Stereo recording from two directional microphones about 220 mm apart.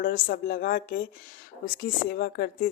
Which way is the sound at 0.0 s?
40° left (ahead or behind).